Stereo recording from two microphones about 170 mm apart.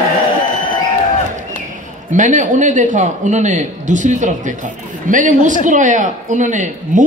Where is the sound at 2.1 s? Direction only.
45° right (ahead or behind).